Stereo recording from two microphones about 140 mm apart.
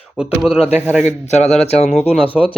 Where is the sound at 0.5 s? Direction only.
45° left (ahead or behind).